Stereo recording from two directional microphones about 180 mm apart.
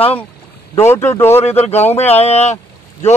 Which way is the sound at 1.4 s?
35° left (ahead or behind).